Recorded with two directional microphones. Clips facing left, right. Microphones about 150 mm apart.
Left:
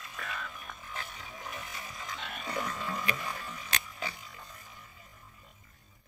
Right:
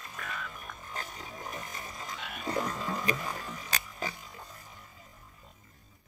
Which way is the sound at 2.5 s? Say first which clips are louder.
Right 4 dB; 45° right (ahead or behind).